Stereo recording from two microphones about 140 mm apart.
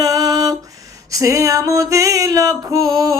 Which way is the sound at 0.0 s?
25° right (ahead or behind).